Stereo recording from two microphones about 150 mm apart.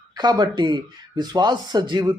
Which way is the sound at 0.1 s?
30° right (ahead or behind).